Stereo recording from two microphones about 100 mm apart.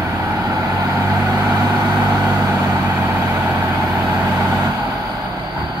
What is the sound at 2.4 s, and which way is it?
Vehicle, 30° right (ahead or behind).